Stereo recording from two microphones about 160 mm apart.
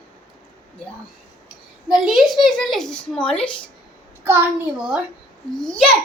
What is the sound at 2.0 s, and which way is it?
A woman's voice, centre (ahead or behind).